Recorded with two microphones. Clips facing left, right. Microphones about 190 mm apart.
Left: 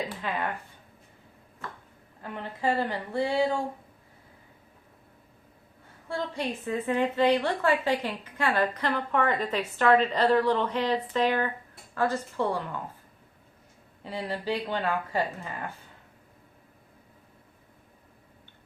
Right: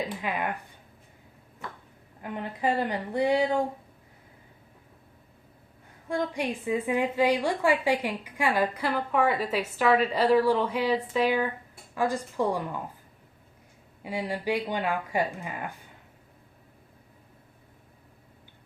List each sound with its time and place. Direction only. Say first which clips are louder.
0.1 s a woman's voice: right 1 dB; 15° right (ahead or behind)
2.2 s a woman's voice: right 1 dB; 15° right (ahead or behind)
6.1 s a woman's voice: right 3 dB; 15° right (ahead or behind)
14.0 s a woman's voice: right 2 dB; 10° right (ahead or behind)